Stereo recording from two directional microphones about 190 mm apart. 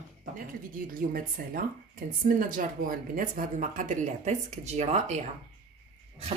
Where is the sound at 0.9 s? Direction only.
50° right (ahead or behind).